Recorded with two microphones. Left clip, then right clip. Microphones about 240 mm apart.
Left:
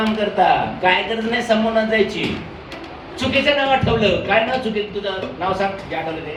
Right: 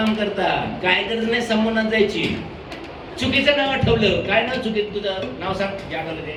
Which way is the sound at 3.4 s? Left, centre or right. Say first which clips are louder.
Left 1 dB; centre.